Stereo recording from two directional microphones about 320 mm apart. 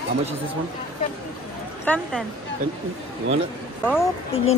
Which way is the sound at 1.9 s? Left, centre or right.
Centre.